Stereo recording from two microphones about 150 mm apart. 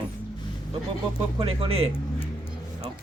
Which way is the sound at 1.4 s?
40° right (ahead or behind).